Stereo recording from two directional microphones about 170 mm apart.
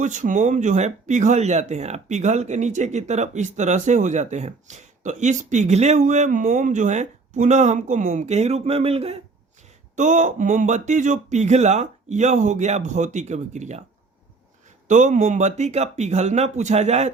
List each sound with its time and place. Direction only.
0.0 s speech: 45° right (ahead or behind)
14.8 s speech: 45° right (ahead or behind)